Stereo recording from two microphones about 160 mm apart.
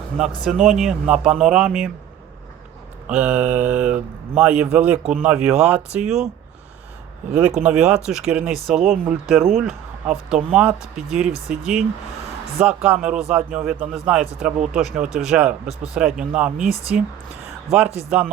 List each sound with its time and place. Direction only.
0.2 s speech: 5° right (ahead or behind)
3.1 s speech: 5° right (ahead or behind)
7.3 s speech: 5° right (ahead or behind)
18.1 s speech: 10° right (ahead or behind)